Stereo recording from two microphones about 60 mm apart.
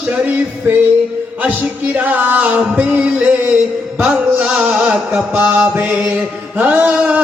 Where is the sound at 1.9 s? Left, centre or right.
Right.